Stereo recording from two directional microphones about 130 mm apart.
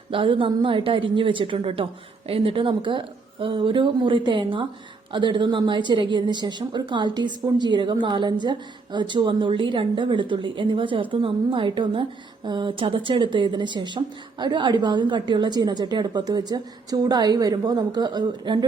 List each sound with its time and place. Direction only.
0.1 s a woman's voice: 40° right (ahead or behind)